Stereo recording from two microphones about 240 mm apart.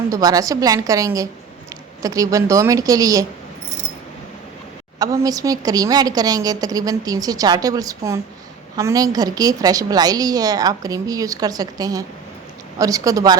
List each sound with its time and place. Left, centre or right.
0.1 s a woman's voice: centre
4.9 s a woman's voice: centre